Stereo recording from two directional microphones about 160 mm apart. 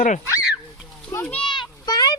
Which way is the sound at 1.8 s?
25° left (ahead or behind).